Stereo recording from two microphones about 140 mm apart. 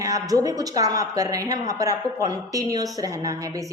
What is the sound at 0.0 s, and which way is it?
Speech, 25° right (ahead or behind).